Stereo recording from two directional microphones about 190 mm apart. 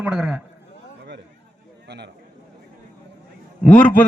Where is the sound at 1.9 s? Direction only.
65° right (ahead or behind).